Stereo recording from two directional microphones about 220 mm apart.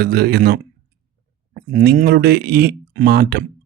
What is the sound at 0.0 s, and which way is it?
Speech, 45° right (ahead or behind).